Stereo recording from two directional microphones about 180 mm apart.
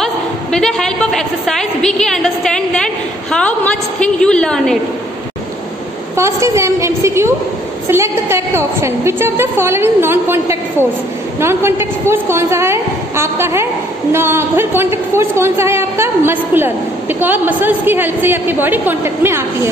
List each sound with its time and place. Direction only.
0.0 s a woman's voice: 5° left (ahead or behind)
6.1 s a man's voice: 15° right (ahead or behind)